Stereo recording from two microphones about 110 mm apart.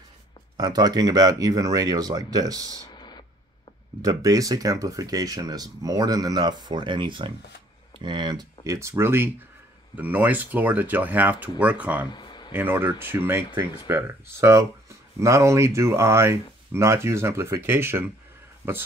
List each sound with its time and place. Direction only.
0.6 s speech: 40° right (ahead or behind)
2.9 s a sound: 40° left (ahead or behind)
4.0 s speech: 35° right (ahead or behind)
8.7 s speech: 25° right (ahead or behind)
12.1 s a sound: 40° left (ahead or behind)
12.5 s speech: 20° right (ahead or behind)